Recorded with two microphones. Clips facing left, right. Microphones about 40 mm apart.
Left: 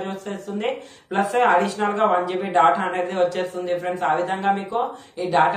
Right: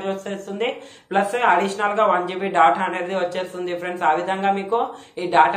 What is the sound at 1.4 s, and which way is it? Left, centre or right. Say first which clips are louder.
A man's voice: left 1 dB; right.